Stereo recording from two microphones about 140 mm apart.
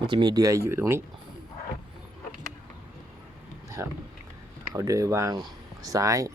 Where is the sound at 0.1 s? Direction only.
30° right (ahead or behind).